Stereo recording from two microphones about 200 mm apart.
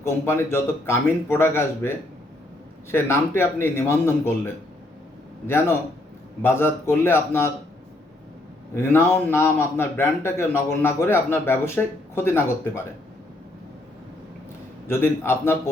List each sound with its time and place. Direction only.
0.0 s a man's voice: 10° left (ahead or behind)
5.5 s a man's voice: 10° left (ahead or behind)
8.7 s a man's voice: 10° left (ahead or behind)
14.8 s a man's voice: 10° left (ahead or behind)